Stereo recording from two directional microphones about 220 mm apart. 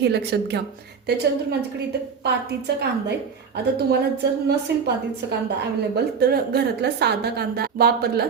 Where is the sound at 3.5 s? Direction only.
50° right (ahead or behind).